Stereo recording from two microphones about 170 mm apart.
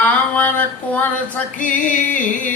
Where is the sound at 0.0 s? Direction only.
10° left (ahead or behind).